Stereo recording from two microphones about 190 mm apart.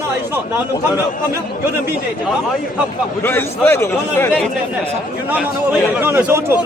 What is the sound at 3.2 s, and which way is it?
A man's voice, 10° left (ahead or behind).